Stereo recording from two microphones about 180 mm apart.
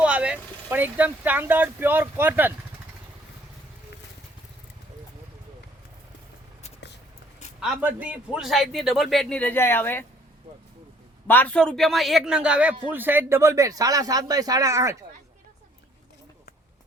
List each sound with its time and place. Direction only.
0.0 s speech: 5° right (ahead or behind)
7.6 s a man's voice: 10° right (ahead or behind); by 10.1 s 10° left (ahead or behind)
11.3 s a man's voice: 10° left (ahead or behind); by 14.9 s 15° right (ahead or behind)